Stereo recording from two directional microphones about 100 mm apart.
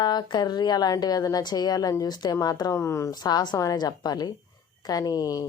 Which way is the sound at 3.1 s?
45° left (ahead or behind).